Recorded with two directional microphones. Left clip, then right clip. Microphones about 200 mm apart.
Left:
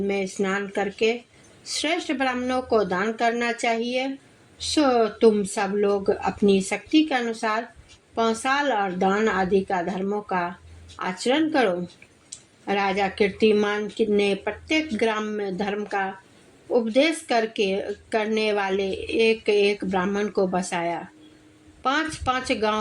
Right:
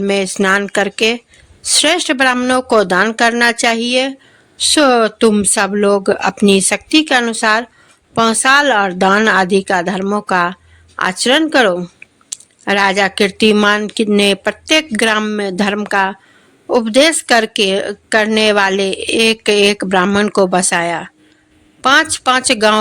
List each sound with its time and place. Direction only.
0.0 s speech: 45° right (ahead or behind)